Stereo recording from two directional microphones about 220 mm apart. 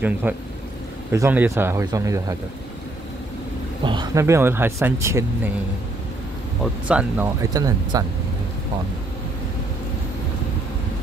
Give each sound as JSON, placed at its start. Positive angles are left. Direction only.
{"t": 0.0, "sound": "speech", "side_deg": -5}
{"t": 3.8, "sound": "speech", "side_deg": -20}
{"t": 6.6, "sound": "speech", "side_deg": -5}
{"t": 7.5, "sound": "speech", "side_deg": -15}